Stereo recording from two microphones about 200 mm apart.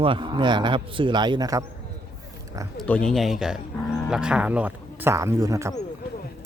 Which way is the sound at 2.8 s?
5° left (ahead or behind).